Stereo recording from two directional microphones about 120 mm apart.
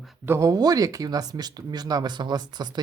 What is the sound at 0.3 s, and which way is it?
Speech, 25° right (ahead or behind).